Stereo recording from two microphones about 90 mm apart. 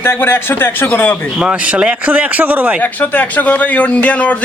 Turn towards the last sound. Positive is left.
turn(degrees=15)  # may be behind; listen again after turning